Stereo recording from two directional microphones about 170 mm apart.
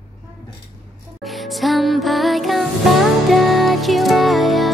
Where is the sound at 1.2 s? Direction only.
Centre (ahead or behind).